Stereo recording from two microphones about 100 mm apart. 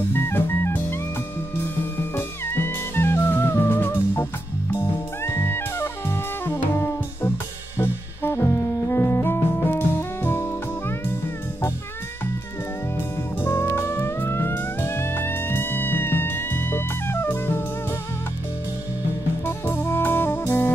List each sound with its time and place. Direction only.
0.1 s music: 20° left (ahead or behind)
2.1 s music: 20° left (ahead or behind)
12.9 s music: 20° left (ahead or behind)
19.4 s music: 25° left (ahead or behind)